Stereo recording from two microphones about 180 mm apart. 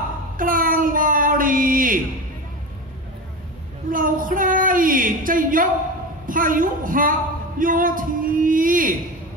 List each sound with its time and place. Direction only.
0.4 s a sound: 50° right (ahead or behind)
3.9 s child singing: 50° right (ahead or behind)
6.2 s a woman's voice: 50° right (ahead or behind)